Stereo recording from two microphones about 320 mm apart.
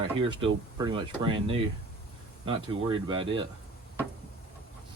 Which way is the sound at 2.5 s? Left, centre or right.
Centre.